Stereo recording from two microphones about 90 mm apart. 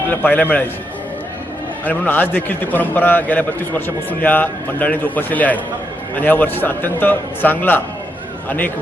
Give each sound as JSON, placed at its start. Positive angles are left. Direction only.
{"t": 0.1, "sound": "a man's voice", "side_deg": 20}
{"t": 1.8, "sound": "a man's voice", "side_deg": 20}